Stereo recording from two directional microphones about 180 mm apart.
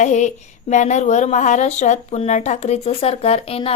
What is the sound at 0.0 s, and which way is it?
A woman's voice, 40° left (ahead or behind).